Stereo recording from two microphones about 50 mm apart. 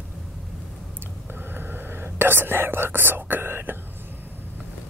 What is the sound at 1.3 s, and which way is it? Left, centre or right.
Whispering, right.